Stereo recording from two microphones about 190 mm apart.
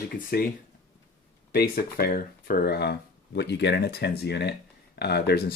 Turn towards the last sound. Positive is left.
turn(degrees=60)  # may be behind; listen again after turning